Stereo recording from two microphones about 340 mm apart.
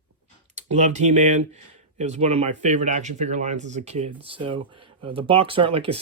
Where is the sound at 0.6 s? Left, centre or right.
Centre.